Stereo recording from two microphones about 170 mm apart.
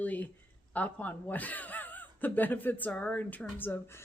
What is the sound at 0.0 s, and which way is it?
A woman's voice, 10° left (ahead or behind).